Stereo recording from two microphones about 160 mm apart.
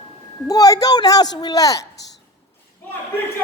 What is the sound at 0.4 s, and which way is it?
A man's voice, 20° left (ahead or behind).